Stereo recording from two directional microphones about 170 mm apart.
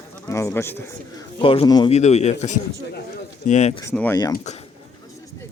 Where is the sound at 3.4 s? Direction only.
45° left (ahead or behind).